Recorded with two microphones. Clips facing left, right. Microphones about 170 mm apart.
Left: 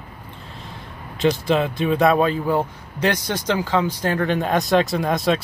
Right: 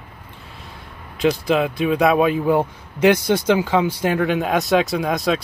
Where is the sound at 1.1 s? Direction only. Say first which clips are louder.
Right 1 dB; 5° right (ahead or behind).